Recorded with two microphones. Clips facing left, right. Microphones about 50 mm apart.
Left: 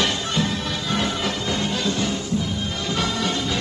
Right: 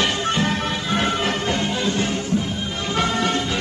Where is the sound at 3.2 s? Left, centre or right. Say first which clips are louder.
Right 2 dB; right.